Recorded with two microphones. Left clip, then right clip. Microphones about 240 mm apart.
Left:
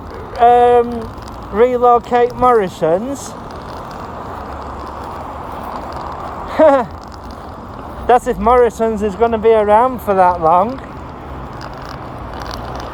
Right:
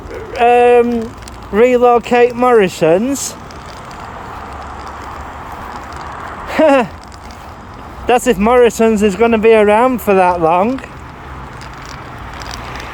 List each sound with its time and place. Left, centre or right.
0.3 s speech: right
6.5 s speech: right
8.0 s speech: right